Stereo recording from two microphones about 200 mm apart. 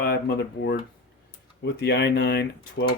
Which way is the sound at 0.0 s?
50° left (ahead or behind).